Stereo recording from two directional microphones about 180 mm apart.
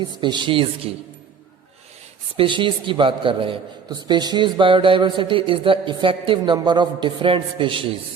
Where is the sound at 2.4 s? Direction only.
25° right (ahead or behind).